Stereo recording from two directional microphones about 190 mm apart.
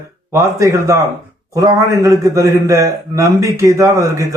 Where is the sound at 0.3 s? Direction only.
15° right (ahead or behind).